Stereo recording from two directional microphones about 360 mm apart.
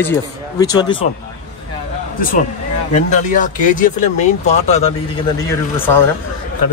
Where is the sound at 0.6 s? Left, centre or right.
Centre.